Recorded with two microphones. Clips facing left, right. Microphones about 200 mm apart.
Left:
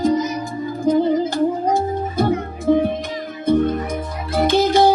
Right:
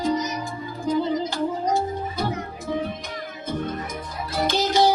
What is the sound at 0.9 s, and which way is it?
Music, 50° left (ahead or behind).